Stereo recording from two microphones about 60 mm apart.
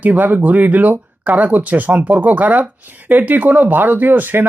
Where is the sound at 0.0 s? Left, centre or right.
Right.